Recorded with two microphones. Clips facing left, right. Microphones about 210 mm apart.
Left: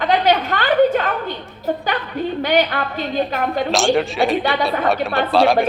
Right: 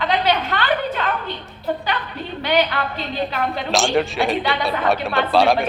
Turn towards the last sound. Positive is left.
turn(degrees=0)  # may be behind; listen again after turning